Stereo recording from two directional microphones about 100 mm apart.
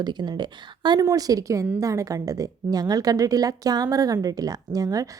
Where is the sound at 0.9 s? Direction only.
35° right (ahead or behind).